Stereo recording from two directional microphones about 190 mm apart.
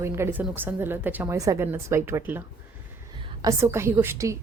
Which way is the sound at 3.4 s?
15° right (ahead or behind).